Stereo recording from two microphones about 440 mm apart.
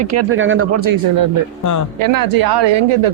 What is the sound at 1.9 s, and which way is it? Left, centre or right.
Speech, right.